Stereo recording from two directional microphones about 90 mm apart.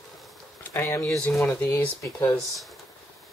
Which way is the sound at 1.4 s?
15° left (ahead or behind).